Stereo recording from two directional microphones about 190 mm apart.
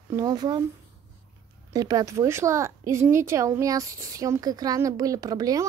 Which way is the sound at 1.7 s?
20° right (ahead or behind).